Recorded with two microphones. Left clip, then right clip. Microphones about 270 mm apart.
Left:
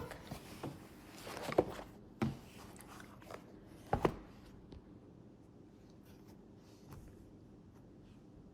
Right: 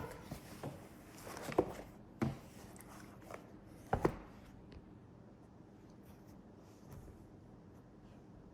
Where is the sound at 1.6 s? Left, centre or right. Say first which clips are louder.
Left 2 dB; centre.